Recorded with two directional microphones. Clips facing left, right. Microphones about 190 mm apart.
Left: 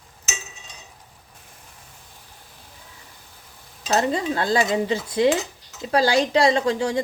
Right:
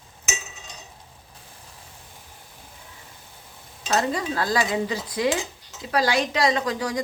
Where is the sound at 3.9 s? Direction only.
25° left (ahead or behind).